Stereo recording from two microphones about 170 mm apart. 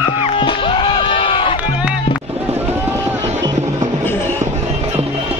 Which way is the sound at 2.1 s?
10° right (ahead or behind).